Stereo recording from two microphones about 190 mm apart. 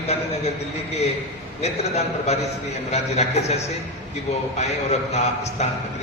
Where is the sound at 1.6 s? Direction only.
35° left (ahead or behind).